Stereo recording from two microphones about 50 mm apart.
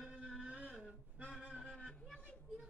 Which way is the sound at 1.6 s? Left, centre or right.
Centre.